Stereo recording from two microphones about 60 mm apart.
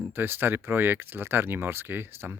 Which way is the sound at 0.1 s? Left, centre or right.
Right.